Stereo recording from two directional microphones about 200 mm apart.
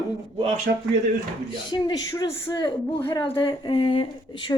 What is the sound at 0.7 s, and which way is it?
Speech, 60° right (ahead or behind).